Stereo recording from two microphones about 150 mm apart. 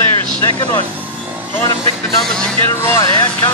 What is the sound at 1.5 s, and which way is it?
Speech, 15° left (ahead or behind).